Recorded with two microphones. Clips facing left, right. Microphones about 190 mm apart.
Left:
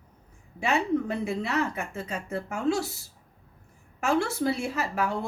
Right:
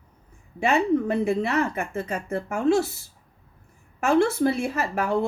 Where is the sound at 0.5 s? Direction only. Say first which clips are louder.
Right 4 dB; 55° right (ahead or behind).